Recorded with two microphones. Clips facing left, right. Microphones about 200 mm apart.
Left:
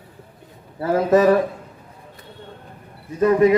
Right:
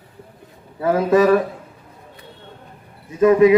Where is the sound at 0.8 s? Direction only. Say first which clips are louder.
Right 1 dB; 45° left (ahead or behind).